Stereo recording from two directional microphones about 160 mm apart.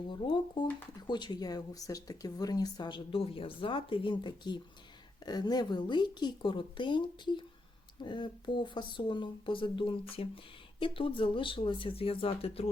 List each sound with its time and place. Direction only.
0.1 s speech: 30° left (ahead or behind)